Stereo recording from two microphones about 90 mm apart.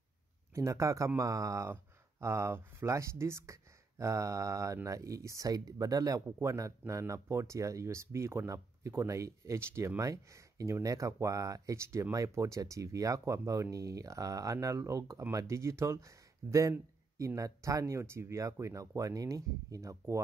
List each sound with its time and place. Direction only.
0.6 s speech: 35° right (ahead or behind)